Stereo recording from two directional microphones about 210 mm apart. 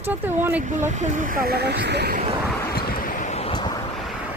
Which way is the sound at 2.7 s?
40° left (ahead or behind).